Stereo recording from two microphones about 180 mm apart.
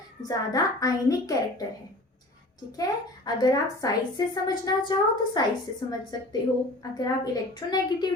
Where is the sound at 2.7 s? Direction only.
20° left (ahead or behind).